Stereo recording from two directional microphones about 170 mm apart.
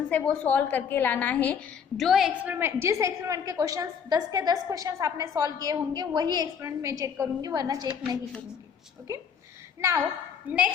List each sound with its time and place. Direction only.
0.1 s a woman's voice: 10° left (ahead or behind); by 8.2 s 25° right (ahead or behind)
10.5 s a woman's voice: 10° right (ahead or behind)